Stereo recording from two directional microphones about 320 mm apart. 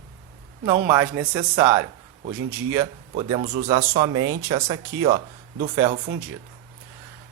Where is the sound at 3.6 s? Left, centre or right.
Centre.